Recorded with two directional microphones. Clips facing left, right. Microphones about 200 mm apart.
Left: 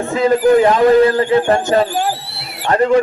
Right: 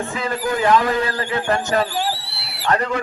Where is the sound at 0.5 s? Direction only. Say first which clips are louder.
Left 5 dB; 30° left (ahead or behind).